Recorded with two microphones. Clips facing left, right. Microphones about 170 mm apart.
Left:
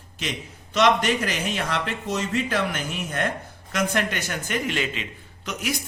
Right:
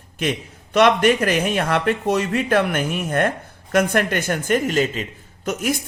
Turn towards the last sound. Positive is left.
turn(degrees=-50)  # may be behind; listen again after turning